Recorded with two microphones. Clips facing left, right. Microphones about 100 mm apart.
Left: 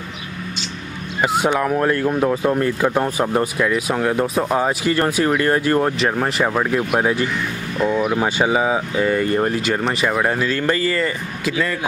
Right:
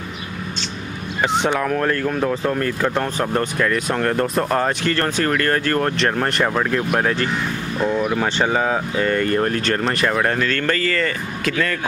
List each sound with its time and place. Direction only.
1.2 s speech: 5° left (ahead or behind)